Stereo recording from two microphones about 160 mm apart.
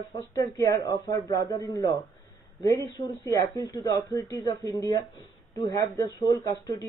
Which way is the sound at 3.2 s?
20° left (ahead or behind).